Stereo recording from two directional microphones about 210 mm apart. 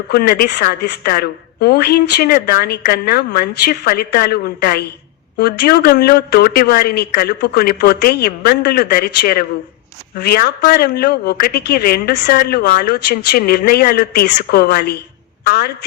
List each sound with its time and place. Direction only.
0.1 s speech: 45° left (ahead or behind)